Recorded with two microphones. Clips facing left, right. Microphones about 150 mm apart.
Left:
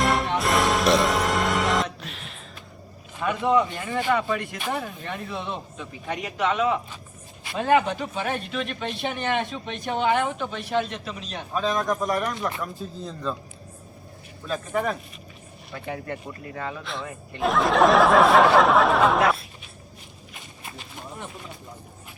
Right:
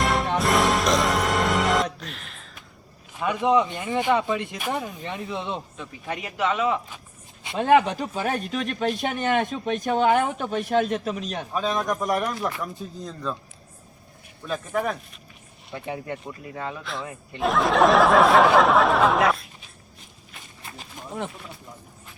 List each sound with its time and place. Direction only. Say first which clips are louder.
0.0 s music: even; centre (ahead or behind)
3.2 s speech: right 1 dB; 15° right (ahead or behind)
5.7 s speech: left 1 dB; centre (ahead or behind)
7.9 s speech: right 2 dB; 35° right (ahead or behind)
11.5 s speech: left 1 dB; 5° right (ahead or behind)
14.4 s speech: even; centre (ahead or behind)
15.7 s speech: right 1 dB; 20° right (ahead or behind)
16.6 s speech: even; centre (ahead or behind)